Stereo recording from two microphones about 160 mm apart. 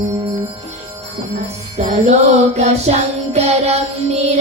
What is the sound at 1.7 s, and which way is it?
Music, 45° right (ahead or behind).